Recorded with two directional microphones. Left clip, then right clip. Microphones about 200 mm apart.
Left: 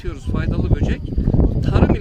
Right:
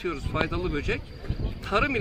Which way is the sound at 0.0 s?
10° left (ahead or behind).